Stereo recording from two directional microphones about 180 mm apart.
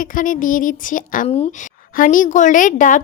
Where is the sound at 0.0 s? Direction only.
50° left (ahead or behind).